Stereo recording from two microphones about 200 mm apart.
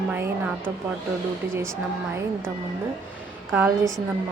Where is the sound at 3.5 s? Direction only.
10° right (ahead or behind).